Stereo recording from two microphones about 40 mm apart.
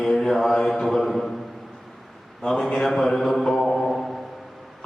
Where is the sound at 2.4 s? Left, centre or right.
Centre.